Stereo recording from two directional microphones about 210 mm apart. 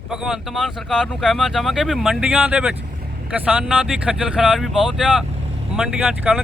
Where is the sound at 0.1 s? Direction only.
Centre (ahead or behind).